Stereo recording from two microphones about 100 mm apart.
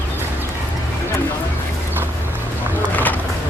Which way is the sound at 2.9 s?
15° left (ahead or behind).